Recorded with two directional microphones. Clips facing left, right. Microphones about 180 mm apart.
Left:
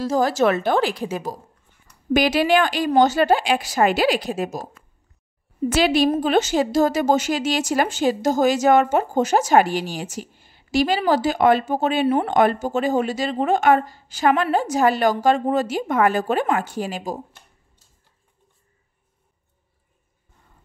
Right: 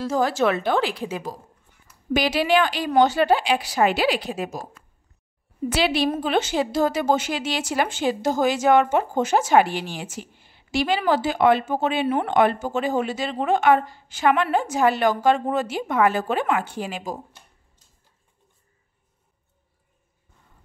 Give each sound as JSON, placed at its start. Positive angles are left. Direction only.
{"t": 0.0, "sound": "a woman's voice", "side_deg": 40}
{"t": 5.7, "sound": "a woman's voice", "side_deg": 45}